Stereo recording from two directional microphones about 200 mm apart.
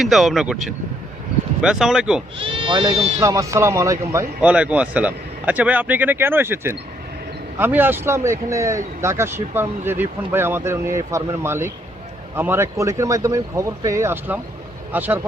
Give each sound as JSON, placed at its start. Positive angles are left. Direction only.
{"t": 0.0, "sound": "speech", "side_deg": 0}
{"t": 2.4, "sound": "speech", "side_deg": -25}